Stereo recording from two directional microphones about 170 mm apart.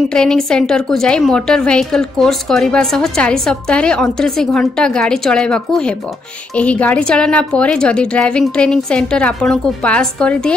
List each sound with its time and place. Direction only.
0.1 s a woman's voice: 5° left (ahead or behind)